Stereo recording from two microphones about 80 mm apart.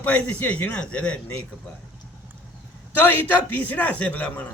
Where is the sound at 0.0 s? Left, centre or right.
Left.